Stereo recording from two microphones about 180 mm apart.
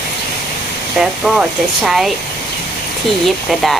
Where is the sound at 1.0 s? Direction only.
5° right (ahead or behind).